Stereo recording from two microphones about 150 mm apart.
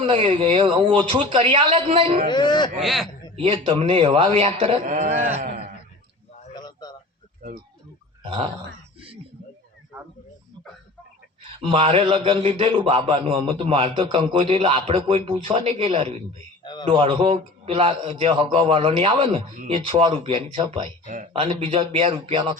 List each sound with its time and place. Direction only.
0.0 s a man's voice: 35° right (ahead or behind)
2.0 s a man's voice: 50° right (ahead or behind)
2.3 s speech: 30° left (ahead or behind)
2.8 s speech: centre (ahead or behind)
3.3 s a man's voice: 35° right (ahead or behind)
4.9 s speech: 60° right (ahead or behind)
6.5 s a sound: 30° left (ahead or behind)
8.2 s a sound: 35° right (ahead or behind)
11.6 s a man's voice: 35° right (ahead or behind)